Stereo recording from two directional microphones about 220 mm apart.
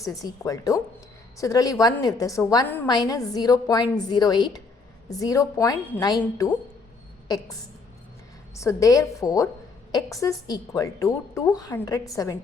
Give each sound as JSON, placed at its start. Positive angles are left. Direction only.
{"t": 0.0, "sound": "a woman's voice", "side_deg": 15}
{"t": 8.5, "sound": "a woman's voice", "side_deg": 15}